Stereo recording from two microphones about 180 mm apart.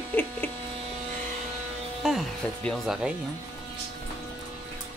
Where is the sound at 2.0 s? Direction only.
Centre (ahead or behind).